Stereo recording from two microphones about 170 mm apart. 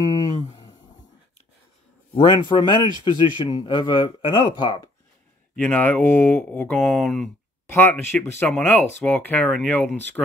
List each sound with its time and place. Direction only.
2.1 s a man's voice: 25° left (ahead or behind)
5.6 s speech: 10° left (ahead or behind)
7.7 s speech: 10° left (ahead or behind)